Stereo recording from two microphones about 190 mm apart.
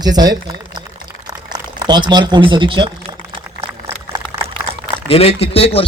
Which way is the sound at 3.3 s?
25° right (ahead or behind).